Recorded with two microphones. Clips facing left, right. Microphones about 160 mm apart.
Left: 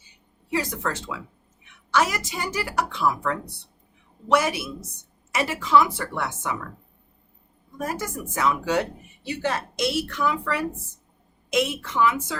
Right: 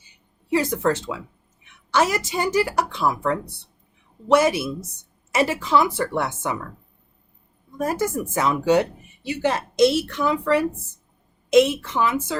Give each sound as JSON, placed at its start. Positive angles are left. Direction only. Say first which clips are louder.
{"t": 0.5, "sound": "speech", "louder": "right 7 dB", "side_deg": -30}
{"t": 7.9, "sound": "speech", "louder": "right 6 dB", "side_deg": -25}